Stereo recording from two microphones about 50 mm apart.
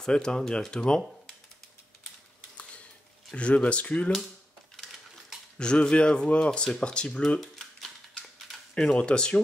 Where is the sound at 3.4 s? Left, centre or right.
Left.